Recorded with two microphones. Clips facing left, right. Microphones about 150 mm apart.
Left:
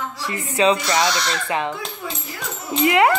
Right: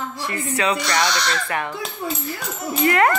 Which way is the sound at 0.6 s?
25° left (ahead or behind).